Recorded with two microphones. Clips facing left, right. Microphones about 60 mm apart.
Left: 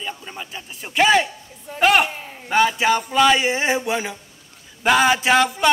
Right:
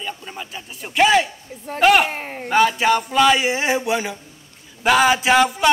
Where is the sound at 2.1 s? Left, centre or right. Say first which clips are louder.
Right 6 dB; right.